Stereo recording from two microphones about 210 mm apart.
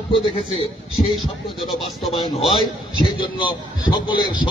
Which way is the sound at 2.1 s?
20° left (ahead or behind).